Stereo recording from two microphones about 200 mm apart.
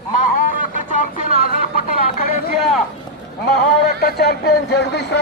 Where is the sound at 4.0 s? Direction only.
55° left (ahead or behind).